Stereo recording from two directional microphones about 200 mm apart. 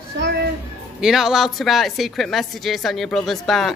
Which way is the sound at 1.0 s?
Centre (ahead or behind).